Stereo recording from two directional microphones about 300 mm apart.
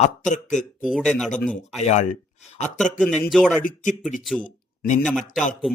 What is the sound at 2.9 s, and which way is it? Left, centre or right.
Speech, centre.